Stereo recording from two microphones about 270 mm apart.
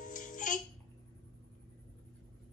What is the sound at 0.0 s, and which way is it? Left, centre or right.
Music, left.